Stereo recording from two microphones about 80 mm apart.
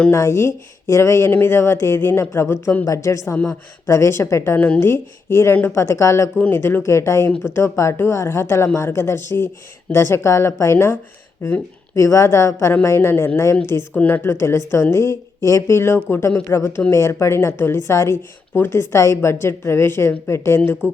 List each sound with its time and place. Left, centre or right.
0.1 s speech: left
6.5 s speech: left
13.9 s speech: centre
20.8 s music: left